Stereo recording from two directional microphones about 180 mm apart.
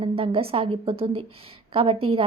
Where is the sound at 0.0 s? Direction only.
30° right (ahead or behind).